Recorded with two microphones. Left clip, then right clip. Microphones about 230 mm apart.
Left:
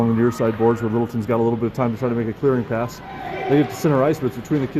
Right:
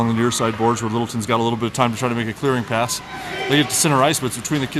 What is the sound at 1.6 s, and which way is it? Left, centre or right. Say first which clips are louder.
Speech: right 2 dB; right.